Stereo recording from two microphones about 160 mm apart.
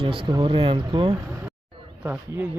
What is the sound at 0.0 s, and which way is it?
Speech, 30° right (ahead or behind).